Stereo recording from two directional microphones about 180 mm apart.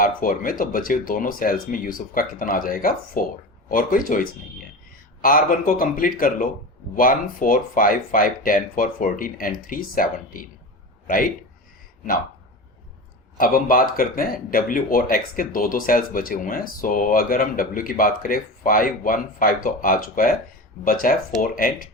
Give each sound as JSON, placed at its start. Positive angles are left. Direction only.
{"t": 0.0, "sound": "speech", "side_deg": 50}
{"t": 11.0, "sound": "a sound", "side_deg": 50}
{"t": 13.3, "sound": "speech", "side_deg": 50}